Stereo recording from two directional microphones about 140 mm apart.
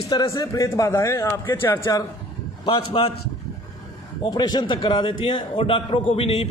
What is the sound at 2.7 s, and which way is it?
Speech, 40° left (ahead or behind).